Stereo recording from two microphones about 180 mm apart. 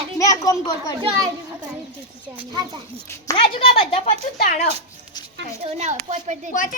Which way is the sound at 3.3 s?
30° left (ahead or behind).